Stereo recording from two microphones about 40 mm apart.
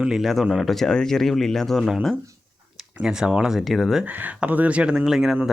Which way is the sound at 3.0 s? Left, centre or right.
Centre.